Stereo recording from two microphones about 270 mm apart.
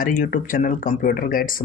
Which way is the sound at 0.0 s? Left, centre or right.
Left.